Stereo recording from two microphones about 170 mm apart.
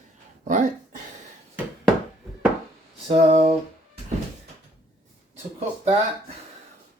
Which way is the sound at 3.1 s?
35° right (ahead or behind).